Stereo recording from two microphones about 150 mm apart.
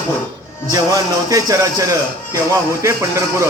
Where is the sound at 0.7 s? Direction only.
25° right (ahead or behind).